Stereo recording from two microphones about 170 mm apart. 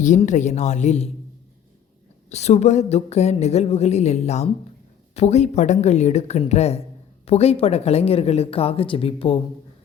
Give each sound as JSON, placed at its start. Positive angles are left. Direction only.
{"t": 0.0, "sound": "a woman's voice", "side_deg": 45}
{"t": 2.3, "sound": "speech", "side_deg": 40}